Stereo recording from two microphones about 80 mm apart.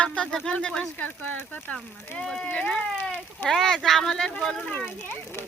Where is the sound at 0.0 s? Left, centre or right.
Centre.